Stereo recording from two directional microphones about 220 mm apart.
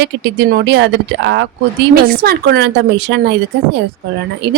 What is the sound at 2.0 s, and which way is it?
A woman's voice, 40° right (ahead or behind).